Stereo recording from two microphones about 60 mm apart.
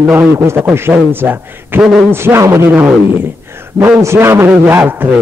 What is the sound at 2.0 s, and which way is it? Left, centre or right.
Speech, right.